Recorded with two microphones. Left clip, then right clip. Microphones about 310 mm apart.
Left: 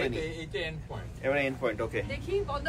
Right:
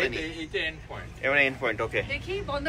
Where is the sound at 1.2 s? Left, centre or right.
Centre.